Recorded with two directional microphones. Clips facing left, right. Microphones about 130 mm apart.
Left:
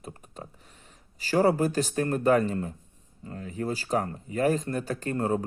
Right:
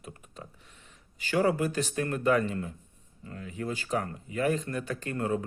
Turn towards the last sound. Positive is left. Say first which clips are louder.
# left 3 dB
turn(degrees=35)  # may be behind; listen again after turning